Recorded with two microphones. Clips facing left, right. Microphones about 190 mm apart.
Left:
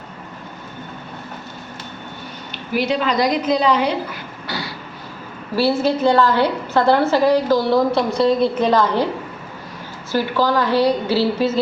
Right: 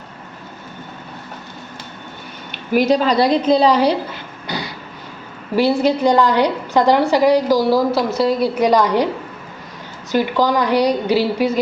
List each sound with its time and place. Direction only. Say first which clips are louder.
2.7 s a woman's voice: right 5 dB; 40° right (ahead or behind)
4.4 s vehicle: right 2 dB; 20° right (ahead or behind)
5.5 s a woman's voice: right 2 dB; 15° right (ahead or behind)
10.1 s a woman's voice: right 2 dB; 15° right (ahead or behind)